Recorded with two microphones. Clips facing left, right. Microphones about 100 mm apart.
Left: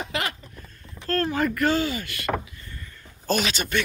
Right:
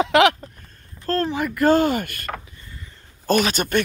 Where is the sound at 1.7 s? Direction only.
50° right (ahead or behind).